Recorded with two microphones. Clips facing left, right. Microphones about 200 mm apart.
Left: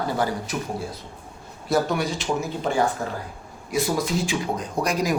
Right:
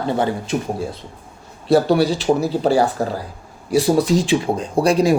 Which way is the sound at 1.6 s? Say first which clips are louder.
Right 8 dB; 30° right (ahead or behind).